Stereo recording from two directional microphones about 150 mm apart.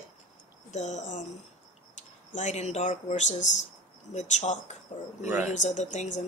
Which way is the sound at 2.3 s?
55° left (ahead or behind).